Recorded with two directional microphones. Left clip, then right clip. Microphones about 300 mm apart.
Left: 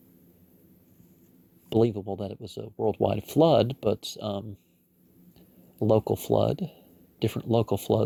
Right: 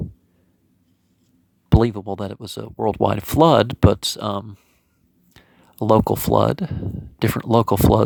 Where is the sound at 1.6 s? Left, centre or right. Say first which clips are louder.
Right 4 dB; right.